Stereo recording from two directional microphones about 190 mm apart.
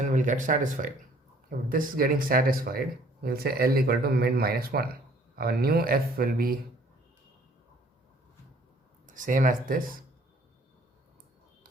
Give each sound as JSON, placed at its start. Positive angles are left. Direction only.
{"t": 0.0, "sound": "speech", "side_deg": -40}
{"t": 9.0, "sound": "speech", "side_deg": -45}